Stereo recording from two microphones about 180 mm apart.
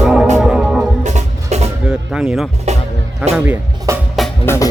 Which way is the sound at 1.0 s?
40° right (ahead or behind).